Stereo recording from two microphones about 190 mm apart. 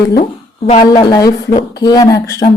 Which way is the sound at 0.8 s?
20° left (ahead or behind).